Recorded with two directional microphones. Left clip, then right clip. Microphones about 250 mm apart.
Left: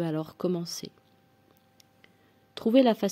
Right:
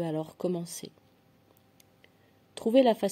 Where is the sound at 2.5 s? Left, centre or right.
Left.